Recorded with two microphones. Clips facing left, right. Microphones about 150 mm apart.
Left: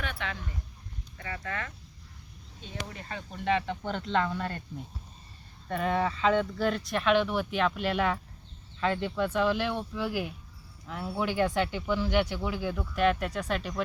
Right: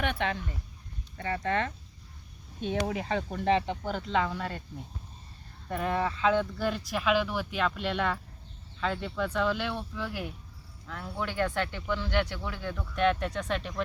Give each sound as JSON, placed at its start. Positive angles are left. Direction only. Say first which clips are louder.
{"t": 1.2, "sound": "speech", "louder": "right 7 dB", "side_deg": -40}
{"t": 2.6, "sound": "speech", "louder": "right 11 dB", "side_deg": -75}
{"t": 3.8, "sound": "speech", "louder": "even", "side_deg": -5}
{"t": 5.6, "sound": "speech", "louder": "left 1 dB", "side_deg": 0}